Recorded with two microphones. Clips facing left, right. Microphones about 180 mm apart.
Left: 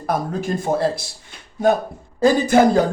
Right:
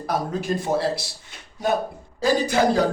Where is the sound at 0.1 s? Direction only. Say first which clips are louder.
Left 1 dB; 50° left (ahead or behind).